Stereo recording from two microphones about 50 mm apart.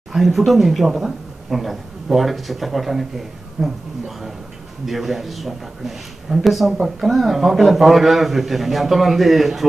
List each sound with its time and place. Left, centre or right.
0.1 s speech: centre
4.8 s speech: centre